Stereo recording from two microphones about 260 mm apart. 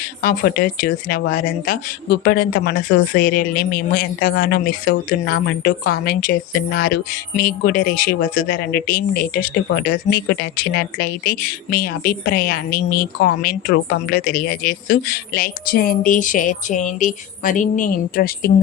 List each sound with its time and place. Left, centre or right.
0.2 s a woman's voice: left